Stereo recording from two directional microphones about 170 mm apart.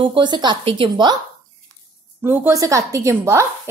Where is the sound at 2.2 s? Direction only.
10° right (ahead or behind).